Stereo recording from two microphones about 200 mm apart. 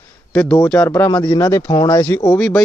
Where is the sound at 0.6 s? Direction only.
5° left (ahead or behind).